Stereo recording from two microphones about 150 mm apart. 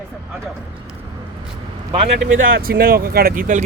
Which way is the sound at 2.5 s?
80° right.